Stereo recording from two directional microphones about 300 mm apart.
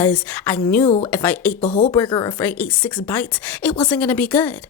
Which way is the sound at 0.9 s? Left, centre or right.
Left.